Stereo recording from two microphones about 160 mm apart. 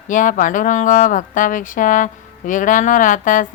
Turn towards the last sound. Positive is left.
turn(degrees=55)  # may be behind; listen again after turning